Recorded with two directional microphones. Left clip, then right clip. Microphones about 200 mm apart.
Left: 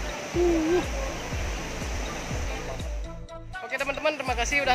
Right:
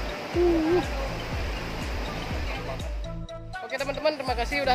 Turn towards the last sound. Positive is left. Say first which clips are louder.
# left 1 dB
turn(degrees=-10)  # may be behind; listen again after turning